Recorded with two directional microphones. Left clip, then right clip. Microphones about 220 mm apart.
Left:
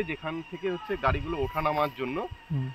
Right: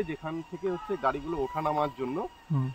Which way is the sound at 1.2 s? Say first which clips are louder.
Left 1 dB; 25° left (ahead or behind).